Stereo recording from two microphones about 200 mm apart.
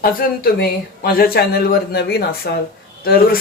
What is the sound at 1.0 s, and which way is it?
Speech, 50° left (ahead or behind).